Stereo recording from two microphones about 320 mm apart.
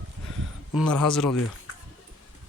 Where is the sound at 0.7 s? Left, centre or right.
Centre.